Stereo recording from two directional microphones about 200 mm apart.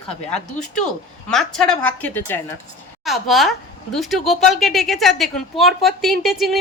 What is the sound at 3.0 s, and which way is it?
Speech, centre (ahead or behind).